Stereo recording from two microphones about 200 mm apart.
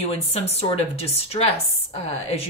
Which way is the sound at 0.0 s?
30° left (ahead or behind).